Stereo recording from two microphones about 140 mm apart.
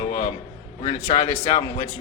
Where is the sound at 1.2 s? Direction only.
30° left (ahead or behind).